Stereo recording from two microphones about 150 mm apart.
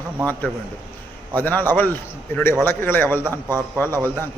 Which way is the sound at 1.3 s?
10° left (ahead or behind).